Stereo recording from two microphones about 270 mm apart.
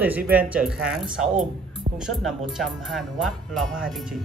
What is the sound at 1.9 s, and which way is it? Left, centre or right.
Music, centre.